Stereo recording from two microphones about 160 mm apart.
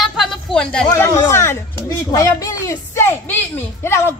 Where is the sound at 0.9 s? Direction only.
20° left (ahead or behind).